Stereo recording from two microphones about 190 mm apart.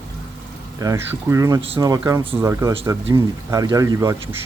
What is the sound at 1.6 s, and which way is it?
Speech, 30° right (ahead or behind).